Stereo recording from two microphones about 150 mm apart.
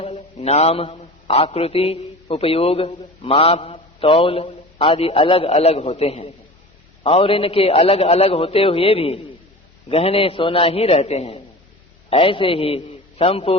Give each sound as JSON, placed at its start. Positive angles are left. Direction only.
{"t": 0.0, "sound": "a man's voice", "side_deg": 45}